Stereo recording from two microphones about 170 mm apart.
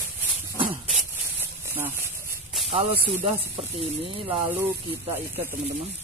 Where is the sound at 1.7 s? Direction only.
15° right (ahead or behind).